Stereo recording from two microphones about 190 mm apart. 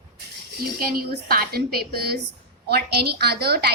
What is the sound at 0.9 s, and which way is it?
A woman's voice, 55° right (ahead or behind).